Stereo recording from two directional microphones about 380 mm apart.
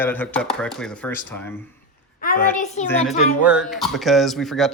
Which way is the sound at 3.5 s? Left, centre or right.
Centre.